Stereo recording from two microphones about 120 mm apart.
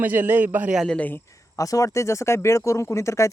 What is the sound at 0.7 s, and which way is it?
Speech, 5° left (ahead or behind).